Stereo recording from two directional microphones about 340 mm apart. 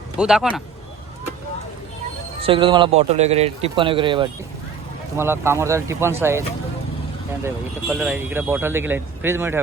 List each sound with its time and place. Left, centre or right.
0.2 s speech: centre
2.4 s speech: centre
7.4 s speech: centre